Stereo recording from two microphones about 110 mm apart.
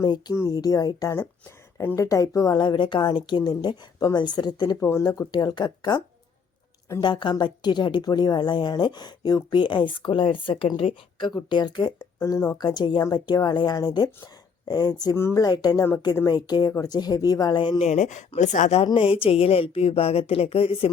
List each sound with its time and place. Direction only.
0.0 s a woman's voice: 40° left (ahead or behind)
4.8 s a woman's voice: 25° left (ahead or behind)
5.0 s a woman's voice: 35° left (ahead or behind)
7.0 s a woman's voice: 45° left (ahead or behind)
11.9 s speech: 25° left (ahead or behind)
12.5 s a woman's voice: 40° left (ahead or behind)
15.1 s a woman's voice: 25° left (ahead or behind)
15.4 s a woman's voice: 35° left (ahead or behind)
17.8 s speech: 90° left
18.9 s speech: 55° left (ahead or behind)